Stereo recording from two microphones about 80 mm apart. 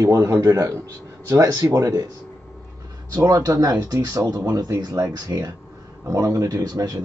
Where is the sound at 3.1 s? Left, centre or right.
Right.